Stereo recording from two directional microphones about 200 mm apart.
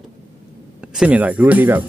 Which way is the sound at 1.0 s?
10° right (ahead or behind).